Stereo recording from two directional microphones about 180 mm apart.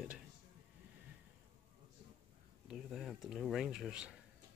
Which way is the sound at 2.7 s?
Centre (ahead or behind).